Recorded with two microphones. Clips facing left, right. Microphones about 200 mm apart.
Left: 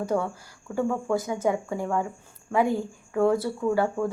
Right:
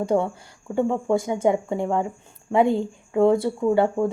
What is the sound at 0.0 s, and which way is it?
Speech, 25° right (ahead or behind).